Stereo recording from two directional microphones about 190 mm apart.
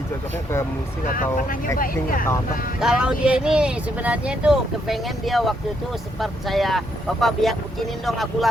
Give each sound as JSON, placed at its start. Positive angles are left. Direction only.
{"t": 1.1, "sound": "speech", "side_deg": 45}
{"t": 2.8, "sound": "speech", "side_deg": -5}